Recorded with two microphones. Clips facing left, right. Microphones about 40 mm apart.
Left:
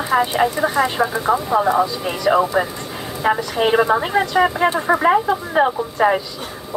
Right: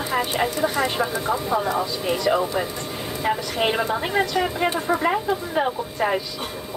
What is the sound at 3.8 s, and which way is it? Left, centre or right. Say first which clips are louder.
Speech: left 6 dB; left.